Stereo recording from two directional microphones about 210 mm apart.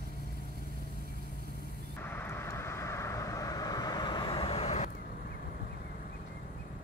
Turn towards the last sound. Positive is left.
turn(degrees=35)  # may be behind; listen again after turning